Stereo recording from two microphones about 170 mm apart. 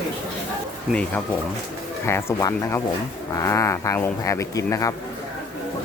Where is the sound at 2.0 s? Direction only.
20° left (ahead or behind).